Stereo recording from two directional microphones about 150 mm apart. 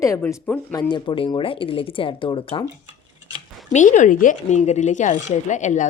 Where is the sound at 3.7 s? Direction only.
55° left (ahead or behind).